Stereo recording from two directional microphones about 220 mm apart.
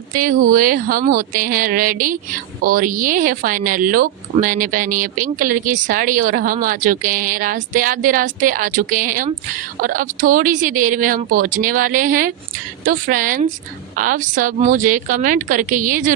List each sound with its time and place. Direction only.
0.1 s speech: 40° right (ahead or behind)